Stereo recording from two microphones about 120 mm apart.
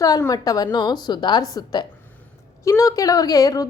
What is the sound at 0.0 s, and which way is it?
A woman's voice, 30° left (ahead or behind).